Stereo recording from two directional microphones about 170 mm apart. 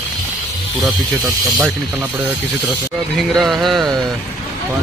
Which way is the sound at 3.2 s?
Centre (ahead or behind).